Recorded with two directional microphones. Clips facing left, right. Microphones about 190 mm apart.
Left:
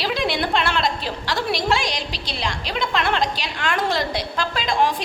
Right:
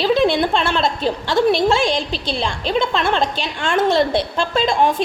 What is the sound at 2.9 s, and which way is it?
A woman's voice, 25° right (ahead or behind).